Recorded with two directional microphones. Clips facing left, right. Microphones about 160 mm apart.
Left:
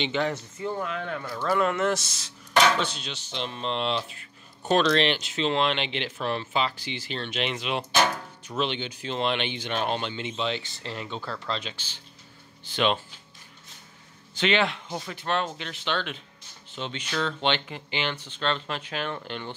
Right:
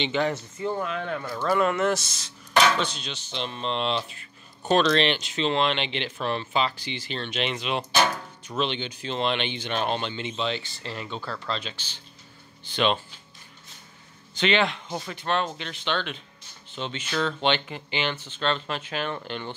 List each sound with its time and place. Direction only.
0.3 s speech: 30° right (ahead or behind); by 2.0 s 10° right (ahead or behind)
2.0 s speech: 5° left (ahead or behind)
14.3 s speech: 5° left (ahead or behind)
14.9 s speech: 10° right (ahead or behind)
15.1 s speech: 5° left (ahead or behind)